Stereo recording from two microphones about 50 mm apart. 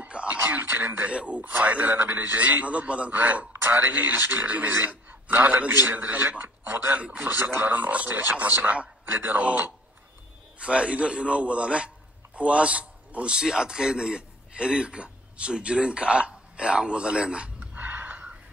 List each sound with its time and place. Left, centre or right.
0.0 s a sound: right
0.7 s speech: right
1.0 s a man's voice: right
3.6 s speech: right
3.9 s a man's voice: right
7.0 s a man's voice: right
7.5 s a man's voice: right
8.1 s a man's voice: right
9.0 s speech: right
10.6 s a man's voice: right
17.7 s a sound: right